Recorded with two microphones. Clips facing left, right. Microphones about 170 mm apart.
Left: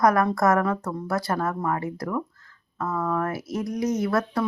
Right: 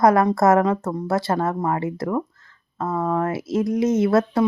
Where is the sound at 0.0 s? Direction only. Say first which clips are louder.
Right 4 dB; 25° right (ahead or behind).